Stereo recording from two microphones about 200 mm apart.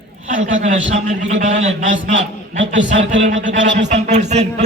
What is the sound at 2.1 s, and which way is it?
A man's voice, 70° right (ahead or behind).